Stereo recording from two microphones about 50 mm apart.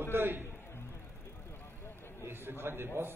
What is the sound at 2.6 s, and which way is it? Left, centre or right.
Speech, right.